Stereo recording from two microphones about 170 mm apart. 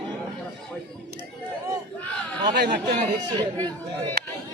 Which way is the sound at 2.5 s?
85° right.